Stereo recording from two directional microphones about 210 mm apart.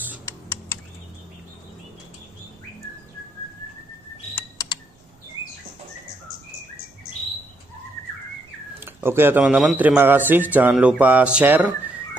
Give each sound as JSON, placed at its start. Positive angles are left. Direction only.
{"t": 0.2, "sound": "computer keyboard", "side_deg": 10}
{"t": 4.4, "sound": "typing", "side_deg": 15}
{"t": 8.7, "sound": "a man's voice", "side_deg": -10}